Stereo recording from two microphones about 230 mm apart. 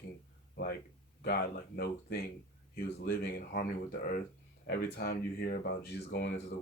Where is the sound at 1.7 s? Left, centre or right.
Left.